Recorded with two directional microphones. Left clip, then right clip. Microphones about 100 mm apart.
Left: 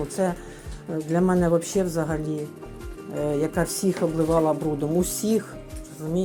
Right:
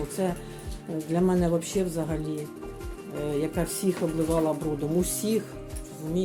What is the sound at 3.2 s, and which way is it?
Speech, 30° left (ahead or behind).